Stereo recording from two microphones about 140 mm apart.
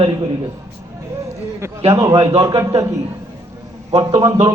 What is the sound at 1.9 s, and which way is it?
A man's voice, 25° right (ahead or behind).